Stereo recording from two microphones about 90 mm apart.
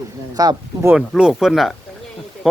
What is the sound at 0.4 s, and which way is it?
Speech, 45° right (ahead or behind).